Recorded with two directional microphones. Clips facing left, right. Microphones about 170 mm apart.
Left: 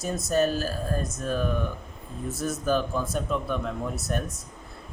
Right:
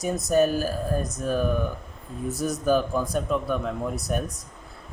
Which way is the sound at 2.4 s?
15° right (ahead or behind).